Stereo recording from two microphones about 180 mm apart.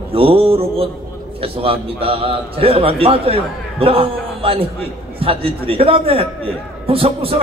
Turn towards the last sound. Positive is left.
turn(degrees=-30)  # may be behind; listen again after turning